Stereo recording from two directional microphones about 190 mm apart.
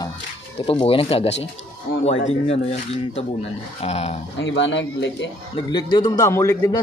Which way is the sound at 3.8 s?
35° left (ahead or behind).